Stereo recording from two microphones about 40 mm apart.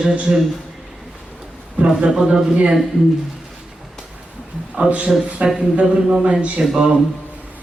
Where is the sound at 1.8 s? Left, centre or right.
Right.